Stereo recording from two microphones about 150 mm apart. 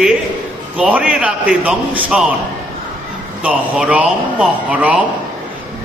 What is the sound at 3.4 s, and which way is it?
Speech, 10° right (ahead or behind).